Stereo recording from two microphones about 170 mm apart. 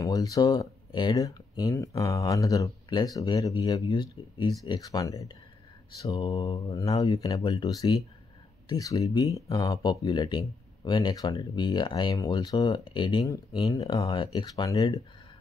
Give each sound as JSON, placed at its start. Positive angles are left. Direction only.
{"t": 0.0, "sound": "speech", "side_deg": 20}